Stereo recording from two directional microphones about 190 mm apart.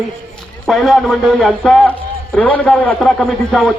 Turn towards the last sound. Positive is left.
turn(degrees=5)  # may be behind; listen again after turning